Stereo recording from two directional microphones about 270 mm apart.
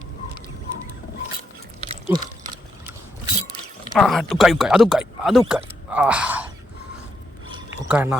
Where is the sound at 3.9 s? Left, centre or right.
Centre.